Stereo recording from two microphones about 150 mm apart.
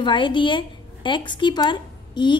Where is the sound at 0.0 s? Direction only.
30° left (ahead or behind).